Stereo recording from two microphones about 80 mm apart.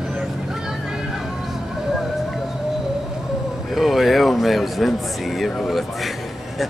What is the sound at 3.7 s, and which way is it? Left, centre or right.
Speech, centre.